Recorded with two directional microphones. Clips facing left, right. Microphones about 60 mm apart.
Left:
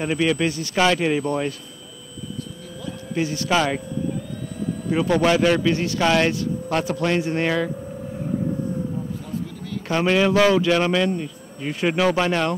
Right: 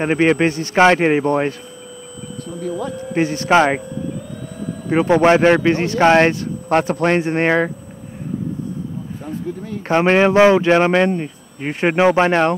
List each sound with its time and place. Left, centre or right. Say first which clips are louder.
0.0 s speech: right 6 dB; right
3.1 s speech: right 6 dB; right
4.8 s speech: right 6 dB; right
9.5 s speech: right 9 dB; right